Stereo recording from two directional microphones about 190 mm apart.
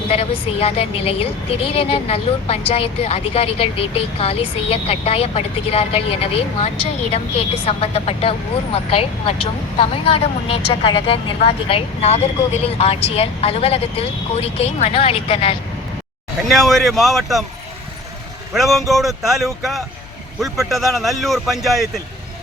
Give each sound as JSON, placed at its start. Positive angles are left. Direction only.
{"t": 0.1, "sound": "a woman's voice", "side_deg": 30}
{"t": 16.5, "sound": "speech", "side_deg": 0}
{"t": 18.5, "sound": "speech", "side_deg": 0}